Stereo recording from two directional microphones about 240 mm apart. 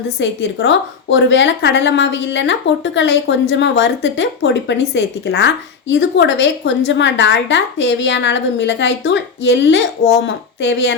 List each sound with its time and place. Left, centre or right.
0.2 s a woman's voice: left